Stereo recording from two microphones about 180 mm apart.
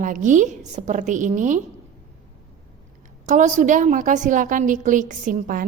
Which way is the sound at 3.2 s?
45° right (ahead or behind).